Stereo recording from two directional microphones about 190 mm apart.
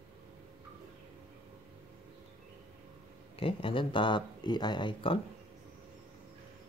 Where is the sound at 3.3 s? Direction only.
30° left (ahead or behind).